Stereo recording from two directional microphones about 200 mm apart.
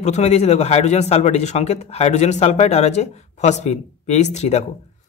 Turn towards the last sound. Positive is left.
turn(degrees=35)  # may be behind; listen again after turning